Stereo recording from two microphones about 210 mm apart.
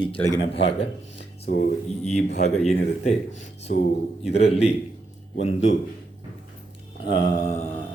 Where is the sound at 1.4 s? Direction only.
45° left (ahead or behind).